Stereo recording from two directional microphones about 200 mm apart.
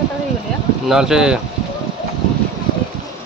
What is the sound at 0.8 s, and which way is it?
Speech, 5° right (ahead or behind).